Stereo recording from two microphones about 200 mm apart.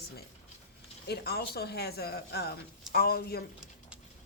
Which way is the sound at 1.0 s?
55° left (ahead or behind).